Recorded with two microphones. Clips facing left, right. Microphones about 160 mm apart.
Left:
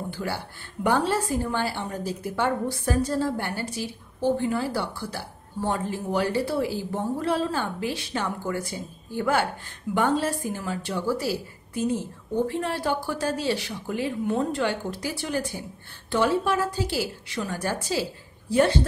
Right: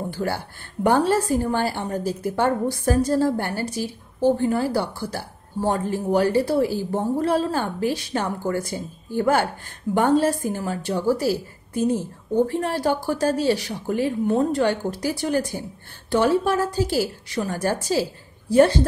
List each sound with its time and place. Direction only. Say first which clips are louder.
0.1 s a woman's voice: right 5 dB; 45° right (ahead or behind)